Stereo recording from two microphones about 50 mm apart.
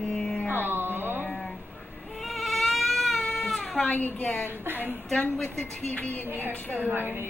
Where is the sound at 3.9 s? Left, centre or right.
Left.